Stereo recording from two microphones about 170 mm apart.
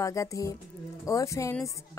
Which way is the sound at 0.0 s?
20° left (ahead or behind).